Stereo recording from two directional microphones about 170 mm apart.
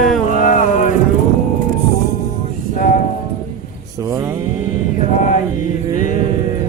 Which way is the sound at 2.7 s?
50° left (ahead or behind).